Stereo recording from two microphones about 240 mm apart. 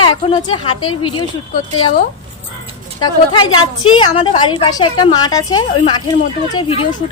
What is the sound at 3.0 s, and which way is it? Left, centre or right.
A woman's voice, centre.